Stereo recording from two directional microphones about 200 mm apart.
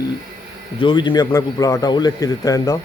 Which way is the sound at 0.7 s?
25° left (ahead or behind).